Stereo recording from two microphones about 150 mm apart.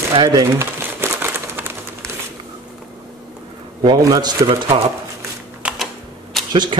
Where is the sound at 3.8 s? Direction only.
25° right (ahead or behind).